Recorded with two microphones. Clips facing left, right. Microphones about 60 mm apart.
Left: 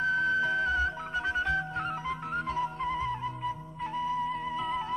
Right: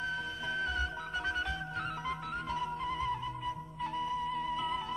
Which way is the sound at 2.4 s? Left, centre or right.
Left.